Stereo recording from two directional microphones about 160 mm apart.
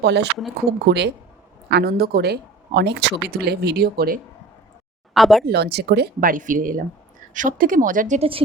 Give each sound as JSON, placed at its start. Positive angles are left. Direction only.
{"t": 0.0, "sound": "speech", "side_deg": -90}
{"t": 1.7, "sound": "speech", "side_deg": -70}
{"t": 5.1, "sound": "speech", "side_deg": 0}
{"t": 5.5, "sound": "speech", "side_deg": -90}